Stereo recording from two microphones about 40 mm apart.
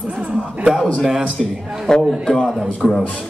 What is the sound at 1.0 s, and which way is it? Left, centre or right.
Speech, centre.